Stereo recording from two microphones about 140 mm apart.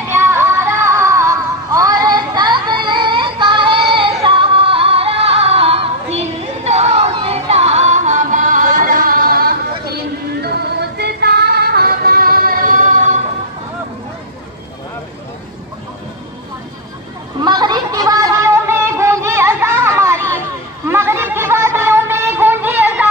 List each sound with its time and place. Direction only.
0.1 s music: 20° right (ahead or behind); by 9.9 s 90° right
11.6 s vehicle: 90° right; by 13.2 s 65° right (ahead or behind)
17.4 s a sound: 30° right (ahead or behind); by 23.0 s 15° right (ahead or behind)